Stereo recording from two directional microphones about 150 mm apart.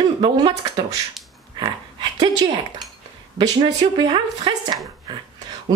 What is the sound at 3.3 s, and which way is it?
Speech, 30° right (ahead or behind).